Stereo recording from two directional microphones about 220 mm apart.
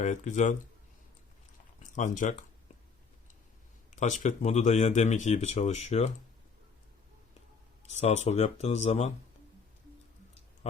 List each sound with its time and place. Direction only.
0.0 s speech: 35° left (ahead or behind)
1.8 s speech: 35° left (ahead or behind)
3.9 s speech: 35° left (ahead or behind)
7.9 s speech: 30° left (ahead or behind)